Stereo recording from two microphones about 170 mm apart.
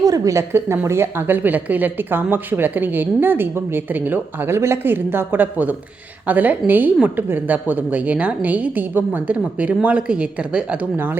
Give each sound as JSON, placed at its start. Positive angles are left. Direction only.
{"t": 0.0, "sound": "a woman's voice", "side_deg": -20}